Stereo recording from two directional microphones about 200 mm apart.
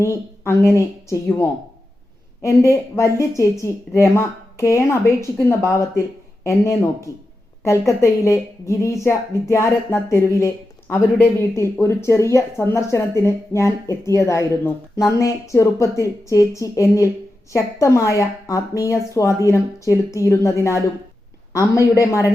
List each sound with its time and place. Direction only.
0.0 s speech: 15° left (ahead or behind)